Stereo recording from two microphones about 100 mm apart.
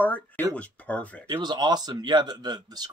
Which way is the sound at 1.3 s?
45° right (ahead or behind).